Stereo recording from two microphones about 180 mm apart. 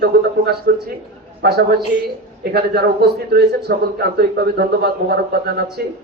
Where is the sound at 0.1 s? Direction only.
60° right (ahead or behind).